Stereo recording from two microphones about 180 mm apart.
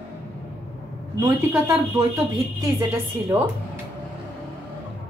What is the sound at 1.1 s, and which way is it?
Speech, 15° right (ahead or behind).